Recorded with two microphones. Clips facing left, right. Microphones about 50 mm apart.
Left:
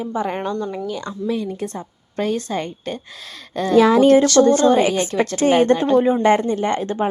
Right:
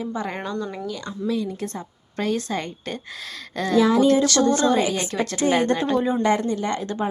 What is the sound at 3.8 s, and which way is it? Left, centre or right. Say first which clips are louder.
Speech: left 5 dB; left.